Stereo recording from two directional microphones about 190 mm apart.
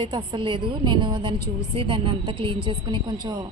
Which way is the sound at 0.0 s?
25° right (ahead or behind).